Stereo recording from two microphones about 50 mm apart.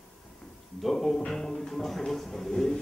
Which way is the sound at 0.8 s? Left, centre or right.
Centre.